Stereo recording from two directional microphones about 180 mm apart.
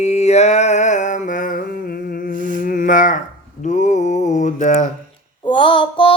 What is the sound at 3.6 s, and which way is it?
Mantra, 45° left (ahead or behind).